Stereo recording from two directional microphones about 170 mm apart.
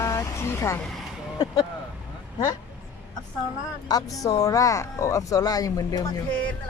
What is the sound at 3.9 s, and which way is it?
Speech, 20° left (ahead or behind).